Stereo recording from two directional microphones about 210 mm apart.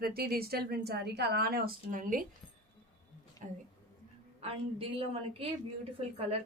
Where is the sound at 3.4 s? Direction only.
35° right (ahead or behind).